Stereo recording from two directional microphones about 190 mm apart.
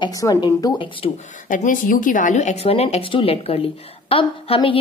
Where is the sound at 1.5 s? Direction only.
45° left (ahead or behind).